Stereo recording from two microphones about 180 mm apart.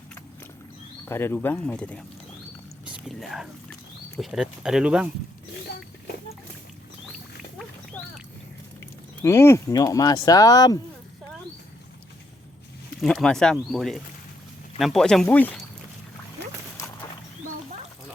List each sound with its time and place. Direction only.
1.0 s speech: 15° left (ahead or behind); by 5.0 s 5° right (ahead or behind)
9.2 s speech: 15° left (ahead or behind)
13.0 s speech: centre (ahead or behind)